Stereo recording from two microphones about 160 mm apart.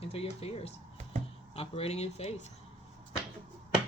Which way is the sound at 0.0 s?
40° left (ahead or behind).